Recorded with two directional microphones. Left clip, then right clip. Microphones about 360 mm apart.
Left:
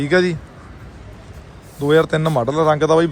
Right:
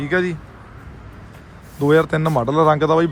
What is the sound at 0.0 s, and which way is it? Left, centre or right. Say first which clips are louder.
Speech: left 4 dB; centre.